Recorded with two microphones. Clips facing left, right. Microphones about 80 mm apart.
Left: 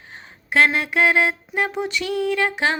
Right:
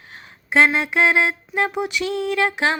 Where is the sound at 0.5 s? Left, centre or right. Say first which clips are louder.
Right 1 dB; centre.